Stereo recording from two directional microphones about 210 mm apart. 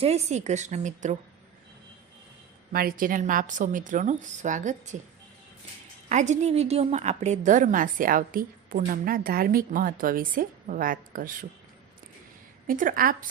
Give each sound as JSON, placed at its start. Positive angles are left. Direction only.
{"t": 0.0, "sound": "a woman's voice", "side_deg": -30}
{"t": 2.7, "sound": "a woman's voice", "side_deg": -45}
{"t": 6.1, "sound": "a woman's voice", "side_deg": -35}
{"t": 12.6, "sound": "a woman's voice", "side_deg": -40}